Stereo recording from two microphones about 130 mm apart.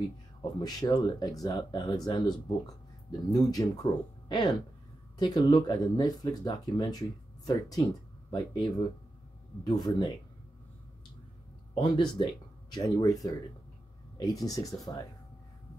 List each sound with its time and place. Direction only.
0.6 s speech: 30° left (ahead or behind)
11.7 s speech: 40° left (ahead or behind)
12.7 s speech: 30° left (ahead or behind)